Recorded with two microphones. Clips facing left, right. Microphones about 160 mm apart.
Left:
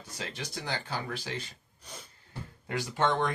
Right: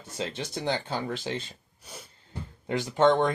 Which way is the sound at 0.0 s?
25° right (ahead or behind).